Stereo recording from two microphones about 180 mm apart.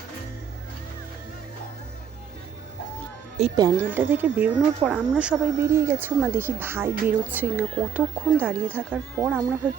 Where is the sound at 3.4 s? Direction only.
35° right (ahead or behind).